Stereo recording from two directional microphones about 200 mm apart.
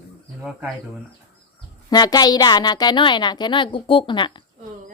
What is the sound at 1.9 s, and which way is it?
Speech, 20° left (ahead or behind).